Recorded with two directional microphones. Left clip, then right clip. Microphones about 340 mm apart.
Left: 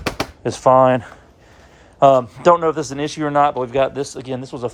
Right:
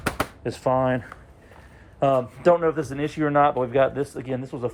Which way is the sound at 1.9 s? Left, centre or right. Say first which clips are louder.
Left 9 dB; centre.